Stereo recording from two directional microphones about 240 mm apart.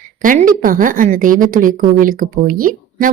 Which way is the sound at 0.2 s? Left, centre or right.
Right.